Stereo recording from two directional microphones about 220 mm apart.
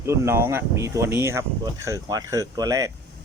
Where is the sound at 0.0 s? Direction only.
10° right (ahead or behind).